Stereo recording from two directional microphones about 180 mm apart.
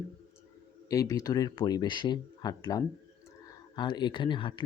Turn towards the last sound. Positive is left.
turn(degrees=25)  # may be behind; listen again after turning